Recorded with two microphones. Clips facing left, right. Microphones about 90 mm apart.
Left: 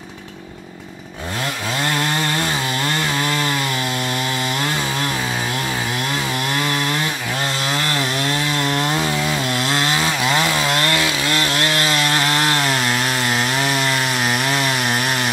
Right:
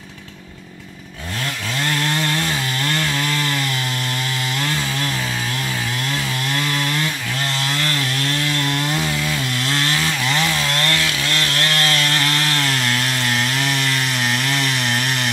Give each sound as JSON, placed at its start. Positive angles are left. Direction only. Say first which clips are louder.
{"t": 8.2, "sound": "chainsaw", "louder": "left 2 dB", "side_deg": 20}
{"t": 8.7, "sound": "chainsaw", "louder": "left 2 dB", "side_deg": 35}
{"t": 9.0, "sound": "chainsaw", "louder": "left 3 dB", "side_deg": 20}